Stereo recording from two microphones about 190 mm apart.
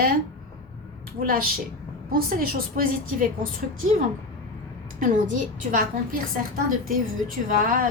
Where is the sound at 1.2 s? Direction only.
45° right (ahead or behind).